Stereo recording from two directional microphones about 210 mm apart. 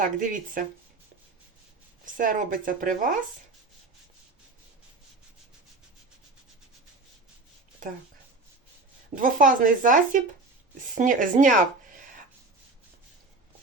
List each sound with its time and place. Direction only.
0.0 s speech: 40° right (ahead or behind)
2.1 s speech: 40° right (ahead or behind)
9.1 s speech: 40° right (ahead or behind)